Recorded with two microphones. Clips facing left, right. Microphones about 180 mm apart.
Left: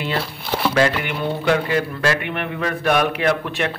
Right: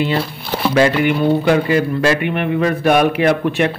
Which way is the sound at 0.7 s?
5° right (ahead or behind).